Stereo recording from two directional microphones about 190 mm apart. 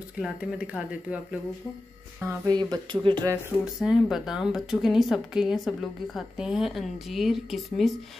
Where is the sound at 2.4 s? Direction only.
20° right (ahead or behind).